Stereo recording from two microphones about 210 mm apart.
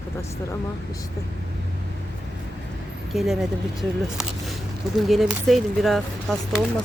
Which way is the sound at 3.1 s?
Centre (ahead or behind).